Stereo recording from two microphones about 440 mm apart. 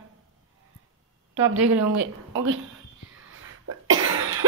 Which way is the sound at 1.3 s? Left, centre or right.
Right.